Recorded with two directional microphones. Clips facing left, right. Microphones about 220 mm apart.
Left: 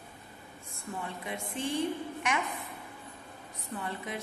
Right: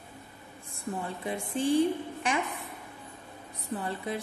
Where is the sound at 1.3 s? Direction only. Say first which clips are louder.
Right 8 dB; 35° right (ahead or behind).